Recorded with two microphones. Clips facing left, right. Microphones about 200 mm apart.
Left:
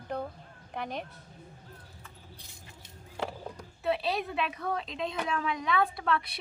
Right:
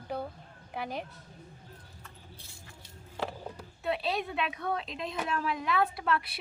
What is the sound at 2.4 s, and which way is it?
Vehicle, 20° left (ahead or behind).